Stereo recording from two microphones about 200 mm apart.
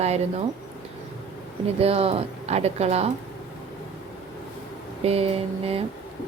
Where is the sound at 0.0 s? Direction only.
35° right (ahead or behind).